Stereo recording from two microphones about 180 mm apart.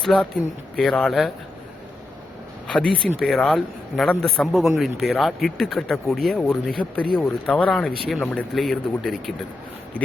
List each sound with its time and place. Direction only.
0.0 s speech: centre (ahead or behind)
2.6 s speech: 5° left (ahead or behind)